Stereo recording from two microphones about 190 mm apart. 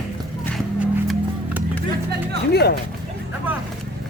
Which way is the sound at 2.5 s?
60° left (ahead or behind).